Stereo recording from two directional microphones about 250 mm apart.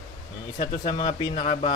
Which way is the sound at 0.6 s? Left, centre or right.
Centre.